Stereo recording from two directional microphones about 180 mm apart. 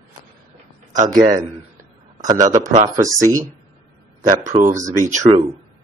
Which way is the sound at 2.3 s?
45° right (ahead or behind).